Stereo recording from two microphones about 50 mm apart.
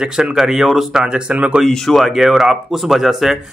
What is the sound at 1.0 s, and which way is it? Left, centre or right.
Speech, centre.